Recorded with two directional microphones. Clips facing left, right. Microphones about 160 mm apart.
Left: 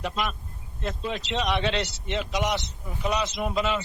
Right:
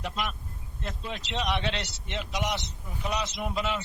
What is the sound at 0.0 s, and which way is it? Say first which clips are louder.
Speech: left 4 dB; 90° left.